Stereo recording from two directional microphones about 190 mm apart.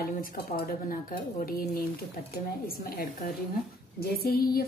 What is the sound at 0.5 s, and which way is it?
Speech, 50° left (ahead or behind).